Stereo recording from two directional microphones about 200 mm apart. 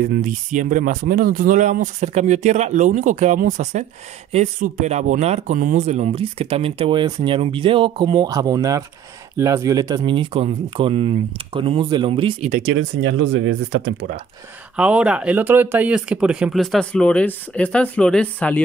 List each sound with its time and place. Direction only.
0.0 s speech: 45° right (ahead or behind); by 12.4 s 25° right (ahead or behind)
12.7 s speech: 75° right (ahead or behind)
14.8 s speech: 5° right (ahead or behind)